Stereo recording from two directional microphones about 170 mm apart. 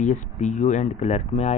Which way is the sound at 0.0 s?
45° left (ahead or behind).